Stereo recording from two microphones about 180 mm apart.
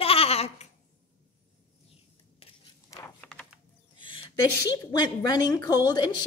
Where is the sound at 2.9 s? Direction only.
15° left (ahead or behind).